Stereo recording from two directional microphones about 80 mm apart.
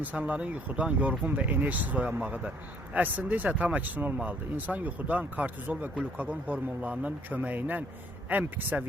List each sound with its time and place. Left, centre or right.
0.0 s speech: centre